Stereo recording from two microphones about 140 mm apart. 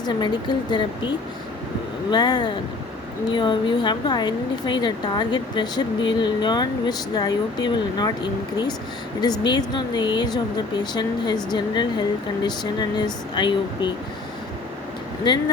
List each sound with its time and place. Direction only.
0.0 s a woman's voice: 30° left (ahead or behind)
15.3 s a woman's voice: 30° left (ahead or behind)